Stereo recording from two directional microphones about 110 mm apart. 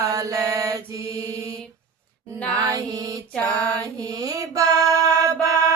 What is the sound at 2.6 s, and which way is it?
Music, 35° right (ahead or behind).